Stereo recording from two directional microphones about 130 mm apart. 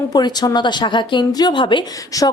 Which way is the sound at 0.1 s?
30° left (ahead or behind).